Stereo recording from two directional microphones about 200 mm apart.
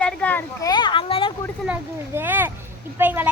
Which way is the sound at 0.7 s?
25° left (ahead or behind).